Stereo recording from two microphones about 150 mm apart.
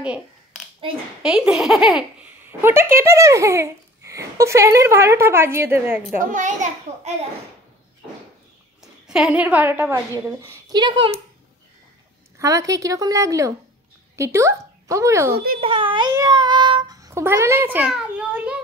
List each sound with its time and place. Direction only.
1.2 s speech: 5° right (ahead or behind)
2.6 s speech: 15° right (ahead or behind)
6.1 s a child's voice: 60° right (ahead or behind)
8.8 s a woman's voice: 5° right (ahead or behind); by 10.8 s 20° right (ahead or behind)
10.8 s a child's voice: 35° right (ahead or behind)
12.4 s a woman's voice: 20° right (ahead or behind)
15.3 s a child's voice: 80° right
15.6 s a child's voice: 35° right (ahead or behind); by 18.6 s 10° right (ahead or behind)